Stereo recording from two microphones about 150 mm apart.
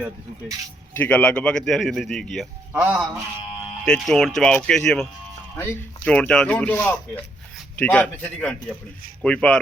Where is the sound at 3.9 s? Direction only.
5° left (ahead or behind).